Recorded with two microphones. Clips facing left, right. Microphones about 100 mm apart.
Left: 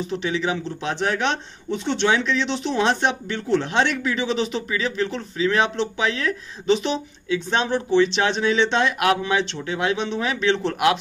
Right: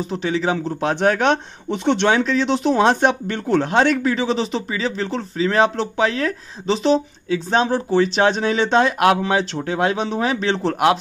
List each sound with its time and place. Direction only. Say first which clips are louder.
0.0 s speech: right 3 dB; 40° right (ahead or behind)